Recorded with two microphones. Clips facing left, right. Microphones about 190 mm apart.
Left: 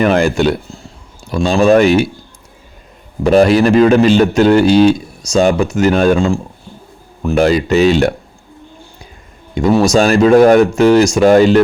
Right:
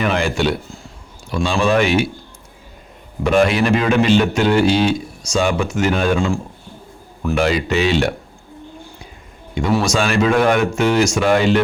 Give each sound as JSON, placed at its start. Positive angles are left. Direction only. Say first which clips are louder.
{"t": 0.0, "sound": "a man's voice", "louder": "left 7 dB", "side_deg": 45}
{"t": 3.2, "sound": "a man's voice", "louder": "left 6 dB", "side_deg": 40}
{"t": 7.3, "sound": "a man's voice", "louder": "left 7 dB", "side_deg": 40}
{"t": 9.7, "sound": "a man's voice", "louder": "left 7 dB", "side_deg": 35}